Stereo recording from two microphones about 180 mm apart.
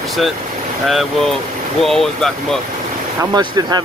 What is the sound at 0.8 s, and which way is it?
Speech, centre (ahead or behind).